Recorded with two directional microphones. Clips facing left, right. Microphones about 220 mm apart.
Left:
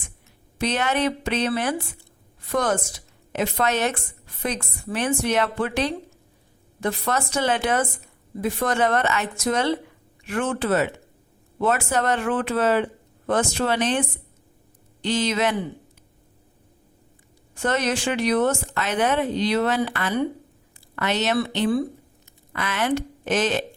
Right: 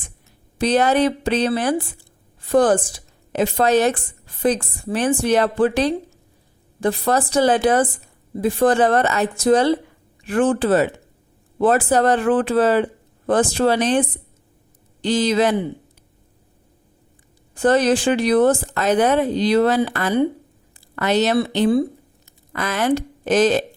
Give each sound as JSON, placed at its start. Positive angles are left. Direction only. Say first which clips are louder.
{"t": 0.6, "sound": "a woman's voice", "louder": "right 6 dB", "side_deg": -35}
{"t": 15.0, "sound": "a woman's voice", "louder": "right 5 dB", "side_deg": -35}
{"t": 17.5, "sound": "a woman's voice", "louder": "right 8 dB", "side_deg": -35}